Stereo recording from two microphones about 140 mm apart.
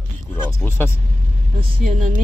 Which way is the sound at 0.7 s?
15° left (ahead or behind).